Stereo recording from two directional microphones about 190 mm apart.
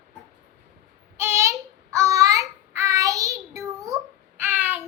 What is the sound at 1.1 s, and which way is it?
Child singing, 15° right (ahead or behind).